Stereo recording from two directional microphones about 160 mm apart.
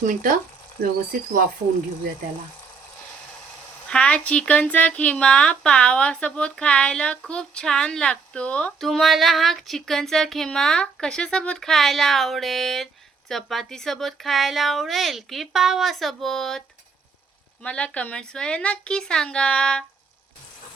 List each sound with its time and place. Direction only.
0.0 s speech: 55° right (ahead or behind)
3.8 s a woman's voice: 5° left (ahead or behind)